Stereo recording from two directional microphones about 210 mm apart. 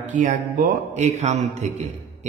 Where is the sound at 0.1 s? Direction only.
35° right (ahead or behind).